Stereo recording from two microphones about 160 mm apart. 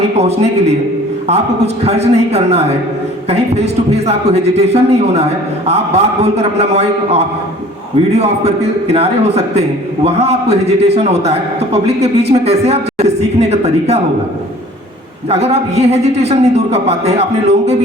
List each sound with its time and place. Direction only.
1.3 s a man's voice: 40° right (ahead or behind)
15.3 s a man's voice: 40° right (ahead or behind)